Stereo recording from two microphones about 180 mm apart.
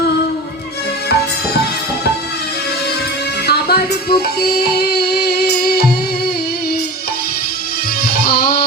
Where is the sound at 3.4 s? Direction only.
60° left (ahead or behind).